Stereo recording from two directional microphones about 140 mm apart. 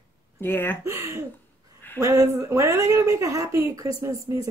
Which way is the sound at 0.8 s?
20° right (ahead or behind).